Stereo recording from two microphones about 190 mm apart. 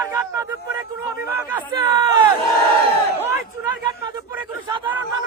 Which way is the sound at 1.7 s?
20° right (ahead or behind).